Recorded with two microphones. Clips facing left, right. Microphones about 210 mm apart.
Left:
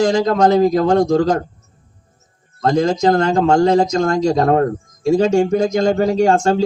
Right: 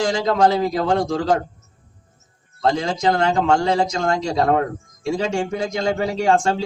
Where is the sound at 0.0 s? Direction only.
45° left (ahead or behind).